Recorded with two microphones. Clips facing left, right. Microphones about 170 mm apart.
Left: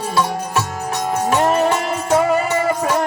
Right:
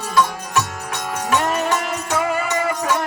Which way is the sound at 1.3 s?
30° left (ahead or behind).